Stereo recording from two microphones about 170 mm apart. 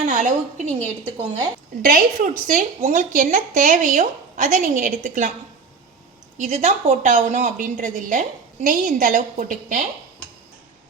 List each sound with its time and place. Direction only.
0.0 s a woman's voice: 50° right (ahead or behind)
1.8 s a woman's voice: 55° right (ahead or behind)
6.3 s a woman's voice: 45° right (ahead or behind)